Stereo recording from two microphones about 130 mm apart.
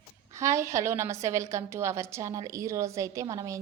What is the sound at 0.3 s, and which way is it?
A woman's voice, 25° right (ahead or behind).